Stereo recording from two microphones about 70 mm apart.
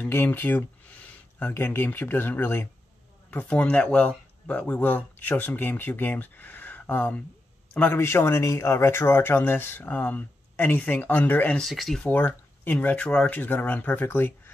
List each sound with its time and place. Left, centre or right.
0.1 s speech: left
7.9 s speech: left
11.7 s speech: centre
12.0 s speech: left
12.8 s speech: centre
13.3 s speech: left